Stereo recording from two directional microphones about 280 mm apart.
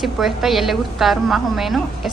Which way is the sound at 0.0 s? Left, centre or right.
Centre.